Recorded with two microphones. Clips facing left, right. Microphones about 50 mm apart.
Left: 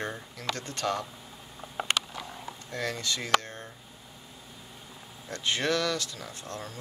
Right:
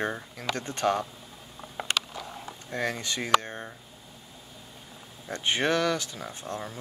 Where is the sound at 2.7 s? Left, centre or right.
Right.